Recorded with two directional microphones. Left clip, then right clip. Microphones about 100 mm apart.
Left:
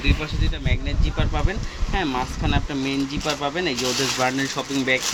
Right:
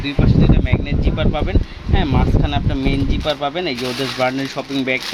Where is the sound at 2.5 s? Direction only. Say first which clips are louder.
Right 4 dB; 55° right (ahead or behind).